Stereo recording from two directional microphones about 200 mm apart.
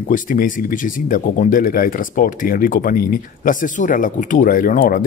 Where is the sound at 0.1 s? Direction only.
40° left (ahead or behind).